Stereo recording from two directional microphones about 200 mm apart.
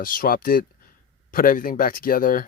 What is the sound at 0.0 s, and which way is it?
Speech, 45° left (ahead or behind).